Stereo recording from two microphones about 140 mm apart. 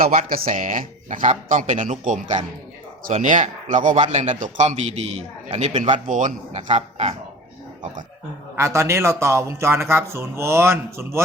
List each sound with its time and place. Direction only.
0.0 s speech: 75° right (ahead or behind)
0.5 s a man's voice: 60° right (ahead or behind)
8.5 s speech: 20° right (ahead or behind)